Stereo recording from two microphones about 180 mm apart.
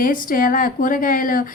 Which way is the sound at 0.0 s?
50° left (ahead or behind).